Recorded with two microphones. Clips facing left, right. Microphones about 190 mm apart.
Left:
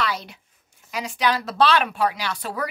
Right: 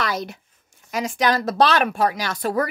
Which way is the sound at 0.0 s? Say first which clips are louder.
Right 2 dB; 45° right (ahead or behind).